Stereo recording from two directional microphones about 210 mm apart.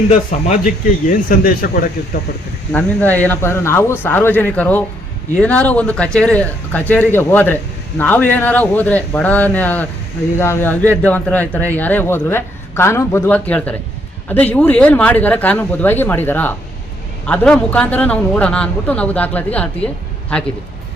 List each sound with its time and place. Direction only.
0.6 s speech: 40° left (ahead or behind)
2.7 s speech: 10° left (ahead or behind)